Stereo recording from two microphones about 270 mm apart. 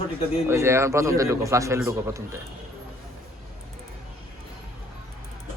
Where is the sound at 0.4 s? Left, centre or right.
Centre.